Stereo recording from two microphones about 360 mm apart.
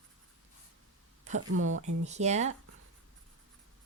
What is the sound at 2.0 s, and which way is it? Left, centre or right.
Speech, centre.